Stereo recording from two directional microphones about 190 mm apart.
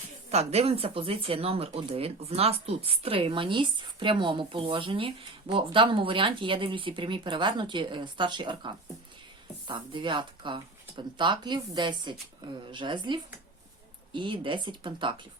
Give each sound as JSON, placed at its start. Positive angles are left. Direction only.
{"t": 0.3, "sound": "speech", "side_deg": -35}